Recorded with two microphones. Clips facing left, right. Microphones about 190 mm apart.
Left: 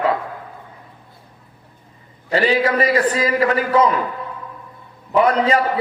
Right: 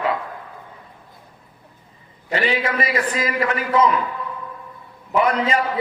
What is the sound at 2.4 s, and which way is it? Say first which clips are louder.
A man's voice: left 6 dB; 35° left (ahead or behind).